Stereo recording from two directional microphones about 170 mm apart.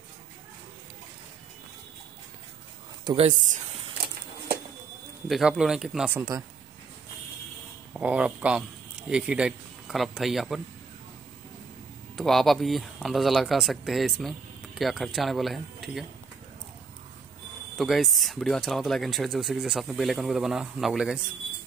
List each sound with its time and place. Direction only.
3.3 s speech: 45° right (ahead or behind)
5.3 s speech: 5° right (ahead or behind)
6.1 s speech: 20° right (ahead or behind)
7.9 s speech: 5° right (ahead or behind)
12.2 s speech: centre (ahead or behind)
17.7 s speech: centre (ahead or behind)